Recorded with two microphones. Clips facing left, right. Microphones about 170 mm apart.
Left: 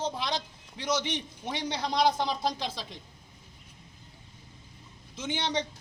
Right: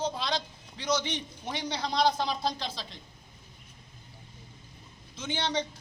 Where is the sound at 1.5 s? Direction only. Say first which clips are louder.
Left 1 dB; 15° left (ahead or behind).